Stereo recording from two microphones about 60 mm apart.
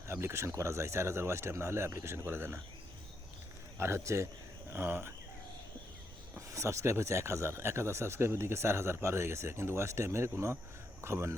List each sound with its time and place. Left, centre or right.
0.1 s speech: right
3.8 s speech: right
4.7 s speech: right
6.3 s speech: right